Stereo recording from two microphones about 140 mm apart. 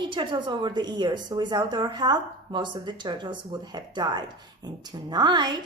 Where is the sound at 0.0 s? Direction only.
35° right (ahead or behind).